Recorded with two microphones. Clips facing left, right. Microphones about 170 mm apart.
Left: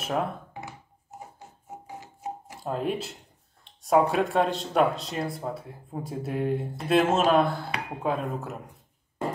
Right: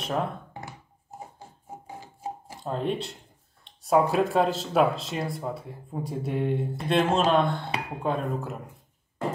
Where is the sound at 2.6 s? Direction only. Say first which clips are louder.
Even; 5° left (ahead or behind).